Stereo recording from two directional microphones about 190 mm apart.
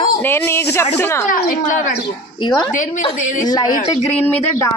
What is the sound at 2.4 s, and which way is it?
A woman's voice, 20° left (ahead or behind).